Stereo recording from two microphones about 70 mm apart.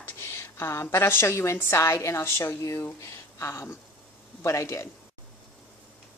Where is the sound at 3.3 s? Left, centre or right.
Left.